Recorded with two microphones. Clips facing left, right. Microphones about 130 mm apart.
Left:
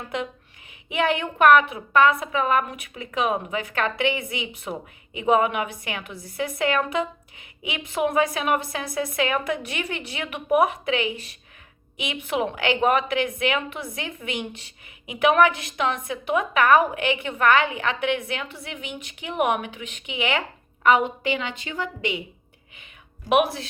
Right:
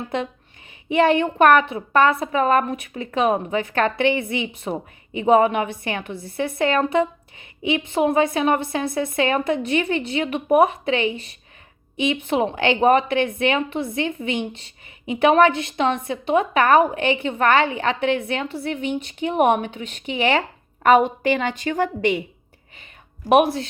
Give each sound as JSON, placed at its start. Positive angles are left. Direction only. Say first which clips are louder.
{"t": 0.9, "sound": "speech", "louder": "right 6 dB", "side_deg": -35}
{"t": 20.8, "sound": "a woman's voice", "louder": "right 4 dB", "side_deg": -45}
{"t": 23.3, "sound": "speech", "louder": "right 4 dB", "side_deg": -30}